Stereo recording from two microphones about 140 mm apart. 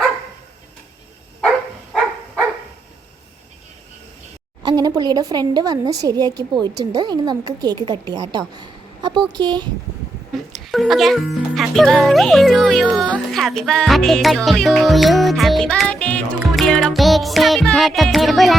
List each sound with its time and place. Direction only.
1.5 s dog: centre (ahead or behind)
4.6 s speech: 25° right (ahead or behind)
10.5 s speech: centre (ahead or behind)